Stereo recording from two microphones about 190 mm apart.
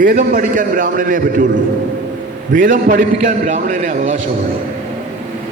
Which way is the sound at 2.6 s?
45° right (ahead or behind).